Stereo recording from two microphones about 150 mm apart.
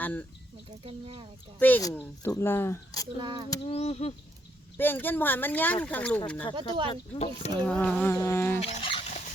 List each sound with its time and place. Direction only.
0.0 s speech: 10° left (ahead or behind)
0.9 s speech: 40° right (ahead or behind)
1.5 s speech: 10° left (ahead or behind)
3.2 s speech: 30° right (ahead or behind)
3.6 s a sound: 40° left (ahead or behind)
4.8 s speech: 15° left (ahead or behind)
7.1 s a sound: 45° left (ahead or behind)
7.6 s speech: 5° left (ahead or behind)
8.1 s speech: 20° left (ahead or behind)
8.6 s rodents: 40° left (ahead or behind)